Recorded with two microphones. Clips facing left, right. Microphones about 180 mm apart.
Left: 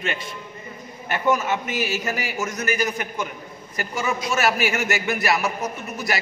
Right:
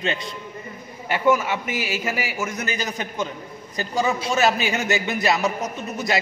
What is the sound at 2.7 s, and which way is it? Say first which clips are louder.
A man's voice: left 3 dB; 20° right (ahead or behind).